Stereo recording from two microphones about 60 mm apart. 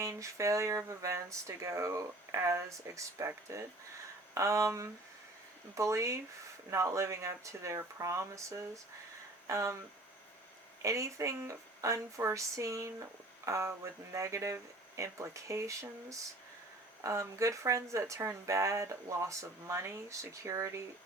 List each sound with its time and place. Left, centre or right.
0.0 s speech: right
10.8 s speech: right